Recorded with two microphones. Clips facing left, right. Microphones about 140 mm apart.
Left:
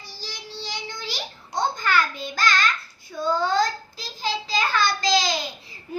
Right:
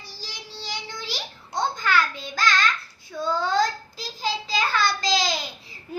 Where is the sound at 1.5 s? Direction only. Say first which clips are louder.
Even; centre (ahead or behind).